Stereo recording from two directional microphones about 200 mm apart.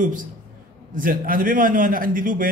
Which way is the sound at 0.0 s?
40° right (ahead or behind).